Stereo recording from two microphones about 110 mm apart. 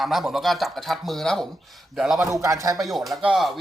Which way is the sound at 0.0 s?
Centre (ahead or behind).